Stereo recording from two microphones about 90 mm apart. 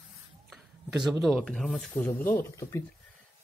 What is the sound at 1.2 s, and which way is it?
Speech, centre (ahead or behind).